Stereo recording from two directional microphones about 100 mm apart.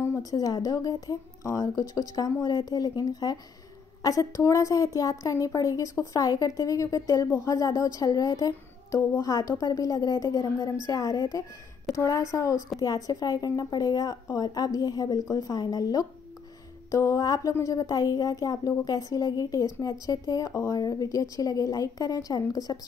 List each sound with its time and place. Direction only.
0.0 s a woman's voice: 30° left (ahead or behind)